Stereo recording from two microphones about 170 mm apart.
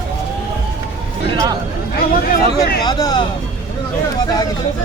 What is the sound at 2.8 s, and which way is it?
Speech, 25° left (ahead or behind).